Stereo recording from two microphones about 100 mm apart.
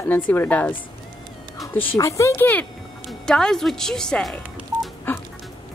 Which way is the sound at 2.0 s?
30° left (ahead or behind).